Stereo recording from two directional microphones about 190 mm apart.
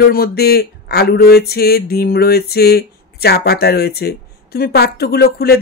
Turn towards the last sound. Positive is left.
turn(degrees=55)  # may be behind; listen again after turning